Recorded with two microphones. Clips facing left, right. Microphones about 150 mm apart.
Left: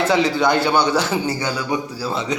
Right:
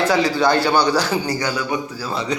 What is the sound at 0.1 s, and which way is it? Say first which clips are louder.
A man's voice: even; 20° left (ahead or behind).